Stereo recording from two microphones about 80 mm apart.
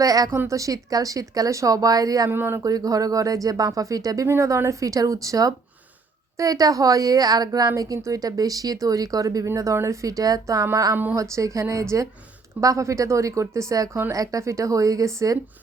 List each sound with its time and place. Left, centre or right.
0.0 s speech: right
0.3 s speech: right
2.3 s speech: right
2.6 s speech: right